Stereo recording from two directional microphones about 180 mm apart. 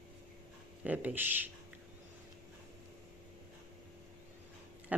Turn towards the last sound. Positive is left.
turn(degrees=-10)  # may be behind; listen again after turning